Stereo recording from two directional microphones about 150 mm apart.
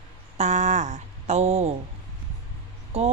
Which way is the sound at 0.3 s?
50° right (ahead or behind).